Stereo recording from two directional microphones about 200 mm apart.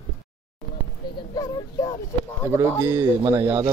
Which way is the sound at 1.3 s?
20° left (ahead or behind).